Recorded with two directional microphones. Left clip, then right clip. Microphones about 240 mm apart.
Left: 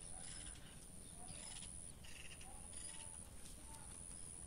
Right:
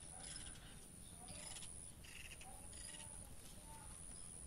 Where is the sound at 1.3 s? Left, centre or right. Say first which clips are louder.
Right 1 dB; right.